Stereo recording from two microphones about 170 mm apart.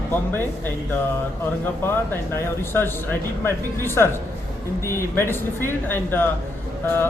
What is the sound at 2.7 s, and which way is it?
Speech, 10° left (ahead or behind).